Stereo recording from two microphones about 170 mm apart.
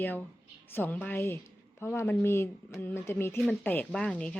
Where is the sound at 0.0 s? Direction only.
10° left (ahead or behind).